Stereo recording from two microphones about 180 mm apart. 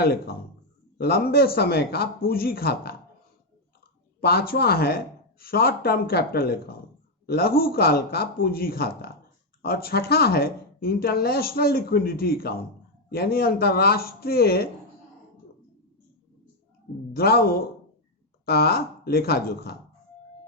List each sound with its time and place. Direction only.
0.0 s speech: 60° left (ahead or behind)
4.2 s speech: 60° left (ahead or behind)
17.2 s speech: 60° left (ahead or behind)